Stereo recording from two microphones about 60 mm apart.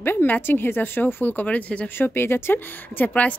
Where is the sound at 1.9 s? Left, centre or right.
Left.